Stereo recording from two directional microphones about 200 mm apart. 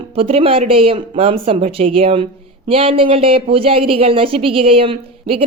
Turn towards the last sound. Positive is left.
turn(degrees=-30)  # may be behind; listen again after turning